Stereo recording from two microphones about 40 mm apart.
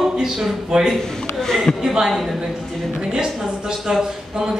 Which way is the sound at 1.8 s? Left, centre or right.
Centre.